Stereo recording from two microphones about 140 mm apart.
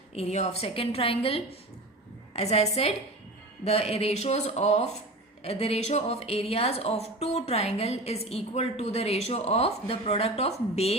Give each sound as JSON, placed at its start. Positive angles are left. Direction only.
{"t": 0.1, "sound": "a woman's voice", "side_deg": 50}